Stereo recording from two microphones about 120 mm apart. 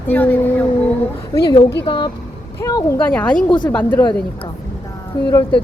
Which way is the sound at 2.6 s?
30° left (ahead or behind).